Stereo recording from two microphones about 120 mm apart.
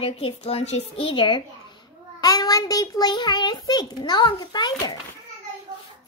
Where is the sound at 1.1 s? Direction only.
45° left (ahead or behind).